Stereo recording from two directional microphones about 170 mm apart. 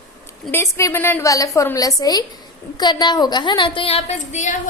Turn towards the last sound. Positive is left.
turn(degrees=45)  # may be behind; listen again after turning